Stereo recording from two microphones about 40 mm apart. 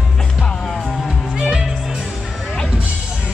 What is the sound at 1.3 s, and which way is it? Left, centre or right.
Music, centre.